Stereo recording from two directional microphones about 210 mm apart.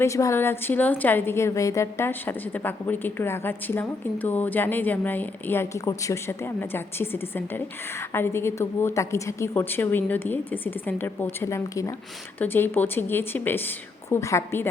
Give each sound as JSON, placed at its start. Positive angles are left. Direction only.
{"t": 0.0, "sound": "a woman's voice", "side_deg": 15}